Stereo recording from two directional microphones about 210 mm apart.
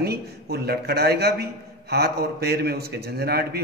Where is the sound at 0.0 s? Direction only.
50° right (ahead or behind).